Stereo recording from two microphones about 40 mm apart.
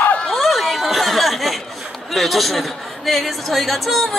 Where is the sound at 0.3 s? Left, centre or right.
Centre.